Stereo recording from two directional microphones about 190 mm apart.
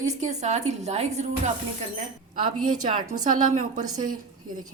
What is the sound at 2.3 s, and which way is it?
A woman's voice, 45° right (ahead or behind).